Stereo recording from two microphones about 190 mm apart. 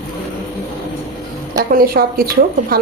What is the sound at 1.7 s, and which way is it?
Speech, 50° right (ahead or behind).